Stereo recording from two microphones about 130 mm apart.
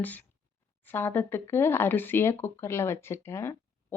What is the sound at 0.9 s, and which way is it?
Speech, 15° left (ahead or behind).